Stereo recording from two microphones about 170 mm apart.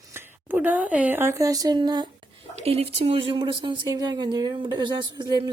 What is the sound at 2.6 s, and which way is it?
Speech, 35° right (ahead or behind).